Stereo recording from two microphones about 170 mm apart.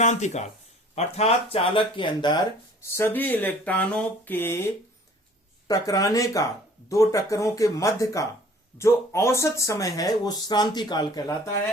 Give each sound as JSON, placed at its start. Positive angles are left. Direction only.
{"t": 0.0, "sound": "speech", "side_deg": 45}
{"t": 2.8, "sound": "speech", "side_deg": 15}